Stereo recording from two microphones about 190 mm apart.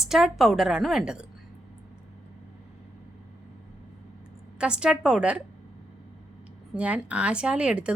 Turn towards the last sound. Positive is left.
turn(degrees=-5)  # may be behind; listen again after turning